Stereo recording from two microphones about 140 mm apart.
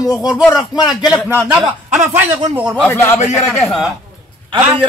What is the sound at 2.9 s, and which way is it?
Speech, 15° left (ahead or behind).